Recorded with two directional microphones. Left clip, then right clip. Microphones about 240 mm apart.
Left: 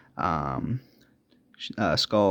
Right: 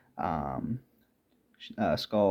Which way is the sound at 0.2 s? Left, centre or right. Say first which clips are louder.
Left 5 dB; left.